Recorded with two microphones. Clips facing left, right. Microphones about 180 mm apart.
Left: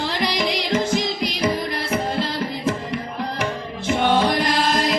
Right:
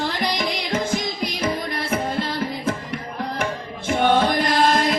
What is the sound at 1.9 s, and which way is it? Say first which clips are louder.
Music: even; 50° right (ahead or behind).